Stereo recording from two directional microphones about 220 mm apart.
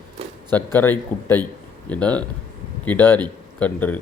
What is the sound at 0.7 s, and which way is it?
Speech, 10° left (ahead or behind).